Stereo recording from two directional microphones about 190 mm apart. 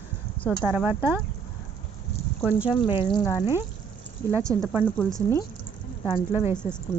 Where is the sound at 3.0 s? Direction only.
25° left (ahead or behind).